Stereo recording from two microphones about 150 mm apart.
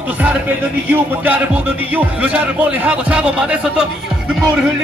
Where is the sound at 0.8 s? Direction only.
10° right (ahead or behind).